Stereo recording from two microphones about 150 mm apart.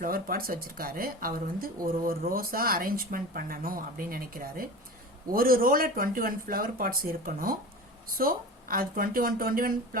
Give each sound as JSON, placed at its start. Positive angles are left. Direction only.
{"t": 0.0, "sound": "speech", "side_deg": -75}